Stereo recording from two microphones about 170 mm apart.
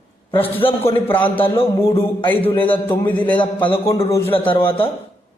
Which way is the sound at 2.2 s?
10° left (ahead or behind).